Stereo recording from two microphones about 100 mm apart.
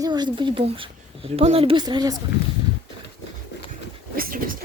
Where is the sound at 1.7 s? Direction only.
50° right (ahead or behind).